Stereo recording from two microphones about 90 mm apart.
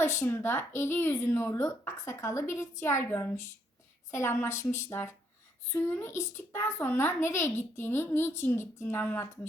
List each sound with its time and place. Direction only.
0.0 s a woman's voice: 30° left (ahead or behind)